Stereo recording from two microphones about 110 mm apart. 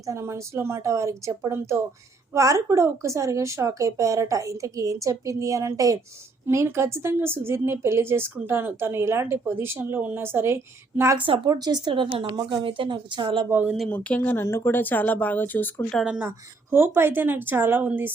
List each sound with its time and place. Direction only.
0.0 s speech: 30° right (ahead or behind)
11.4 s speech: 35° right (ahead or behind)
12.2 s speech: 35° right (ahead or behind)
12.5 s speech: 50° right (ahead or behind)
13.5 s speech: 20° right (ahead or behind)
13.7 s speech: 10° left (ahead or behind)
14.4 s speech: 25° left (ahead or behind)
16.0 s speech: 10° right (ahead or behind)